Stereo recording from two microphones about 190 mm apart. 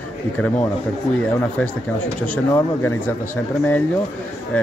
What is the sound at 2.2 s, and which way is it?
Speech, 10° left (ahead or behind).